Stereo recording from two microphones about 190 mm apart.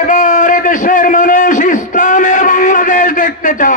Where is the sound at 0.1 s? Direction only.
45° left (ahead or behind).